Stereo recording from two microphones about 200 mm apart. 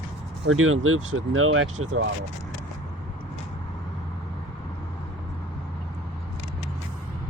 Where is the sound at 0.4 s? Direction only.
90° right.